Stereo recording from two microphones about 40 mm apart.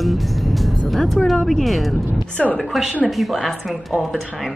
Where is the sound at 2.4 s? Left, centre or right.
Centre.